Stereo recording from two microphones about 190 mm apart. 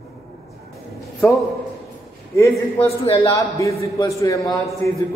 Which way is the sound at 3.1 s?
15° left (ahead or behind).